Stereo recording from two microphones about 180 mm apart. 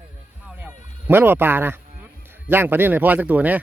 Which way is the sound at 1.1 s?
10° right (ahead or behind).